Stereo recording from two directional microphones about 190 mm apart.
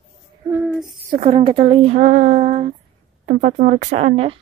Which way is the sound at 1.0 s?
35° right (ahead or behind).